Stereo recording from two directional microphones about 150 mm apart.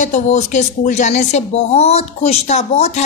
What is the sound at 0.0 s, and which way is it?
Speech, 55° left (ahead or behind).